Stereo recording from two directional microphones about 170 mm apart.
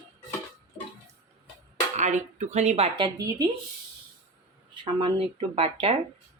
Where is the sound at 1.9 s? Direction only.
45° right (ahead or behind); by 3.4 s 20° right (ahead or behind).